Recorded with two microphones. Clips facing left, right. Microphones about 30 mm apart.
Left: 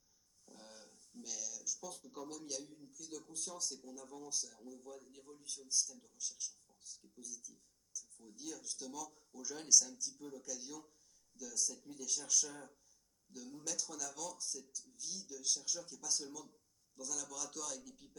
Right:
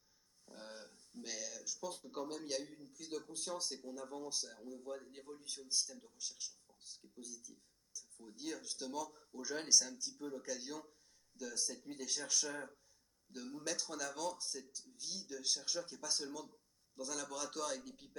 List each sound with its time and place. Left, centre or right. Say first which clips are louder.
0.4 s speech: right 5 dB; right